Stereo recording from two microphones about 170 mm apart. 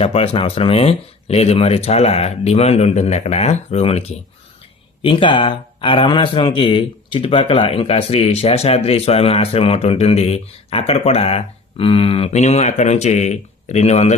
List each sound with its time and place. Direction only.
0.0 s speech: 35° left (ahead or behind)
5.0 s speech: 30° left (ahead or behind)